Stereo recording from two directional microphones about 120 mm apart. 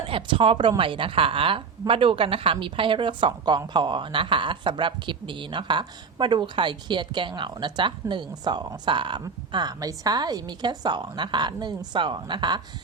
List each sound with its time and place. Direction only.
0.1 s a woman's voice: 45° right (ahead or behind)